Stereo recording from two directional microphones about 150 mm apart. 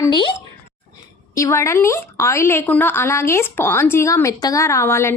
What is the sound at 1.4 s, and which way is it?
A woman's voice, 20° left (ahead or behind).